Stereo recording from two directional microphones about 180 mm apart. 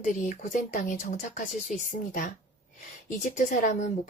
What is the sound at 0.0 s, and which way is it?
A woman's voice, 45° left (ahead or behind).